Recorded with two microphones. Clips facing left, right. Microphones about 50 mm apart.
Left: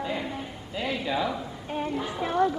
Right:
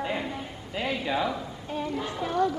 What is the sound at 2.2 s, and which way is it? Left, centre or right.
Speech, left.